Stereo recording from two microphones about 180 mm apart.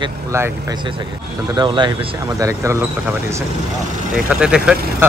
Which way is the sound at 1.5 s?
25° right (ahead or behind).